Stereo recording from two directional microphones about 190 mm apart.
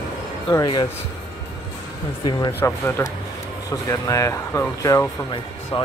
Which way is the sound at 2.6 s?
15° left (ahead or behind).